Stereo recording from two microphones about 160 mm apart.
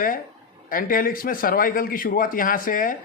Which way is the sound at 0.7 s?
60° left (ahead or behind).